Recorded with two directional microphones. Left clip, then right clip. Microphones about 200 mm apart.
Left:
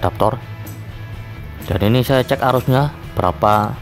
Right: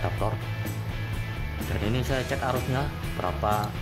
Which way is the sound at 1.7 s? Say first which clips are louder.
Left 14 dB; 55° left (ahead or behind).